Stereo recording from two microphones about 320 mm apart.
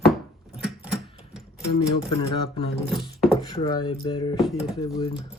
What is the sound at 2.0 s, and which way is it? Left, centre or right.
Speech, centre.